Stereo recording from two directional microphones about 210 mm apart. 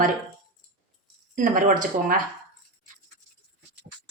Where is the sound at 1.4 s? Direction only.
40° right (ahead or behind).